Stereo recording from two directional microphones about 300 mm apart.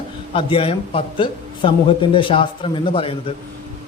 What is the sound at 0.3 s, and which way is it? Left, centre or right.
A man's voice, centre.